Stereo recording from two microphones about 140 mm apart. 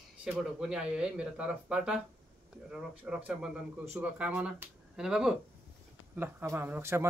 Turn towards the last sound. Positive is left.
turn(degrees=-20)  # may be behind; listen again after turning